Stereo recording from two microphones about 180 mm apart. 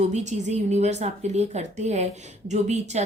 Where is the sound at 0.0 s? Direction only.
40° right (ahead or behind).